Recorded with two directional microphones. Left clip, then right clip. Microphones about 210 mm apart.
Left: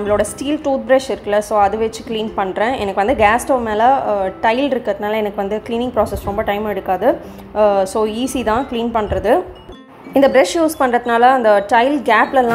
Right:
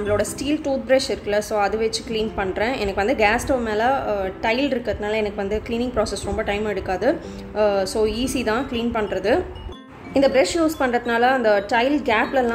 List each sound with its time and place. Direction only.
0.0 s a woman's voice: 5° left (ahead or behind)
1.8 s a woman's voice: 55° left (ahead or behind)
2.1 s a woman's voice: 5° left (ahead or behind)